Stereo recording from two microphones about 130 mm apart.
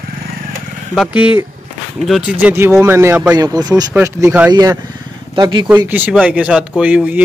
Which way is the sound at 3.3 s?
30° right (ahead or behind).